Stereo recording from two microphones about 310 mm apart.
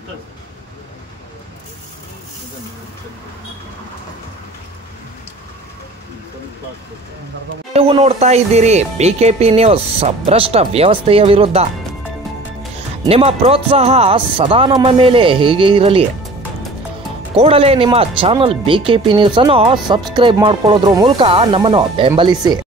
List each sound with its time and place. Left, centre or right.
7.7 s speech: centre
13.0 s speech: centre
17.3 s speech: centre